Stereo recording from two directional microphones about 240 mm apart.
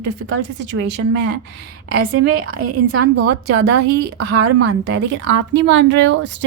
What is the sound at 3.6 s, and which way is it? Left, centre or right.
Speech, right.